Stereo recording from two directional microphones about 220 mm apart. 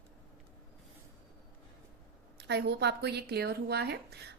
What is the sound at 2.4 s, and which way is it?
Speech, 50° right (ahead or behind).